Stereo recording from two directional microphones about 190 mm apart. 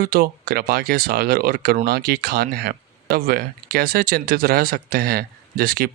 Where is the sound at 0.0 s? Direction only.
50° right (ahead or behind).